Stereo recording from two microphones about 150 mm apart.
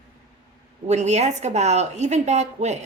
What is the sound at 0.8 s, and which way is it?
A woman's voice, 50° right (ahead or behind).